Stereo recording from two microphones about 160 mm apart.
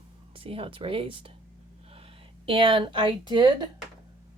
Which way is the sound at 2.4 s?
35° right (ahead or behind).